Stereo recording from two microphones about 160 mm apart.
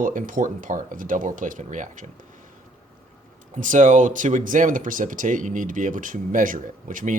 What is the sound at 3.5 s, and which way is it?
Speech, 55° right (ahead or behind).